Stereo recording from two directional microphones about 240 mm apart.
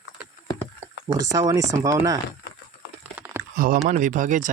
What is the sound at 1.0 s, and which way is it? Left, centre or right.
Speech, centre.